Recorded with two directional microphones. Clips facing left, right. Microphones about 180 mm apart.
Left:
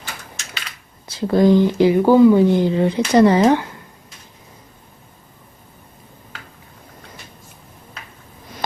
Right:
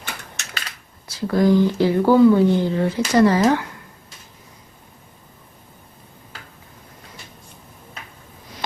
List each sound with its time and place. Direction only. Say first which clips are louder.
1.0 s speech: left 3 dB; 20° left (ahead or behind)